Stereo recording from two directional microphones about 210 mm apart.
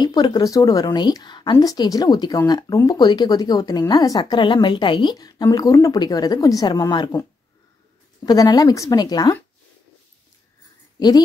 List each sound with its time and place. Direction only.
0.0 s speech: 20° left (ahead or behind)
11.0 s a woman's voice: 20° left (ahead or behind)